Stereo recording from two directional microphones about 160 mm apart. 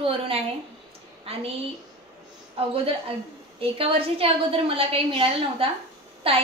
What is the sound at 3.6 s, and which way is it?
A woman's voice, 35° right (ahead or behind).